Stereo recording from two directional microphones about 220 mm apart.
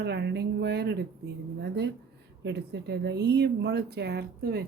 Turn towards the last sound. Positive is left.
turn(degrees=-45)  # may be behind; listen again after turning